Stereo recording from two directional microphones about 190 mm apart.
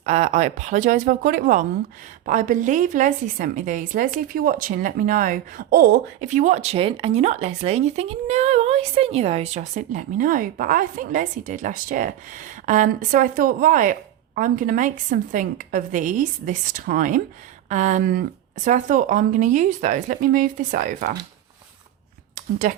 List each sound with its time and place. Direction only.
0.0 s a woman's voice: 35° right (ahead or behind)
22.6 s a woman's voice: 45° right (ahead or behind)